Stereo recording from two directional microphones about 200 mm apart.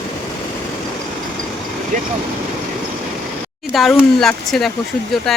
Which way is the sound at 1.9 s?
40° right (ahead or behind).